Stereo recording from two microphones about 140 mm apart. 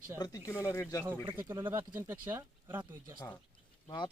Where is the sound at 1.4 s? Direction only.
15° right (ahead or behind).